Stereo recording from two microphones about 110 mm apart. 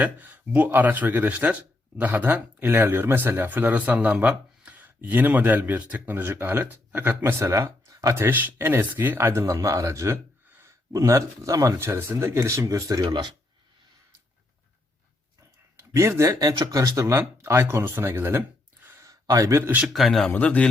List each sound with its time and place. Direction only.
0.0 s speech: 15° right (ahead or behind); by 13.3 s 40° right (ahead or behind)
15.8 s speech: 25° right (ahead or behind)
19.0 s a man's voice: 30° right (ahead or behind)
19.8 s a man's voice: centre (ahead or behind)
20.3 s speech: 10° left (ahead or behind)